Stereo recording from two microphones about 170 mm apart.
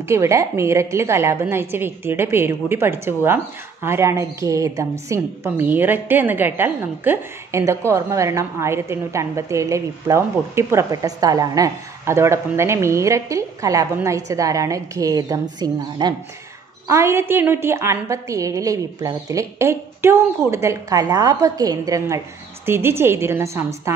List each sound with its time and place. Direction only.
0.1 s a woman's voice: 15° right (ahead or behind)